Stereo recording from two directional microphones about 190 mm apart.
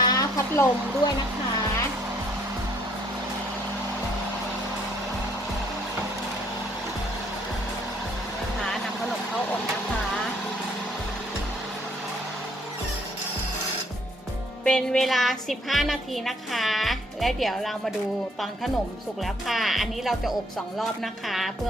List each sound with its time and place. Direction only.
0.0 s music: 20° left (ahead or behind)
8.6 s vehicle: centre (ahead or behind)
14.6 s a woman's voice: 5° left (ahead or behind)
19.2 s a woman's voice: centre (ahead or behind)